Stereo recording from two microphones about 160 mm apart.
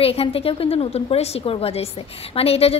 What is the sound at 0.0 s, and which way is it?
A woman's voice, 35° left (ahead or behind).